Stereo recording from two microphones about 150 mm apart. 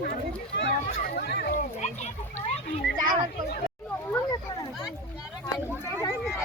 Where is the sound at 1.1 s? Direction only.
90° left.